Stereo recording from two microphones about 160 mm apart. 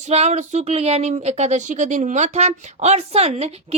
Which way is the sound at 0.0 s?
45° right (ahead or behind).